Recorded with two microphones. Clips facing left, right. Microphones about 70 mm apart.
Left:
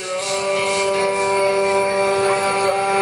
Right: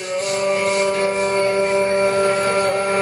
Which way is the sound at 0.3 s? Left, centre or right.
Centre.